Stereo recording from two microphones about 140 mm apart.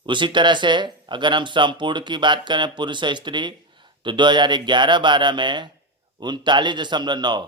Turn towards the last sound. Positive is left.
turn(degrees=-30)  # may be behind; listen again after turning